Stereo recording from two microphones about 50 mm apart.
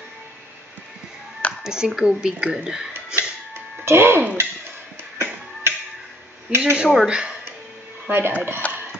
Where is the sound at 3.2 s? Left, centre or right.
Right.